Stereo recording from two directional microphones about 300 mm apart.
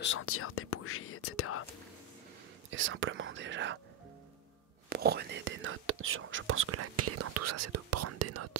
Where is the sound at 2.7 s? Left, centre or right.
Right.